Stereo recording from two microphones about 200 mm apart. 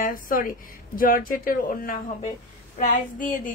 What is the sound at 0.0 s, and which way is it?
A woman's voice, 45° left (ahead or behind).